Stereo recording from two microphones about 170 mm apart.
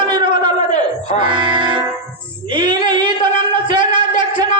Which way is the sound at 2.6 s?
25° right (ahead or behind).